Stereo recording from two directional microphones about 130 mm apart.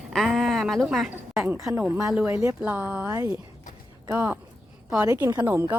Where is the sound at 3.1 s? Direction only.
25° right (ahead or behind).